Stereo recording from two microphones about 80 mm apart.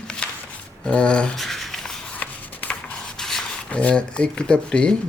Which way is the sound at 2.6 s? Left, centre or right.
Left.